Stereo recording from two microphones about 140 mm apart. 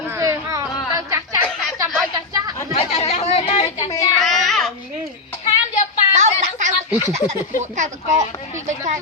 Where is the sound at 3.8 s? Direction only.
25° left (ahead or behind).